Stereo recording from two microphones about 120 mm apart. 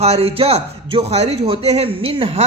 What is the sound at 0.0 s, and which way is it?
Speech, 55° right (ahead or behind).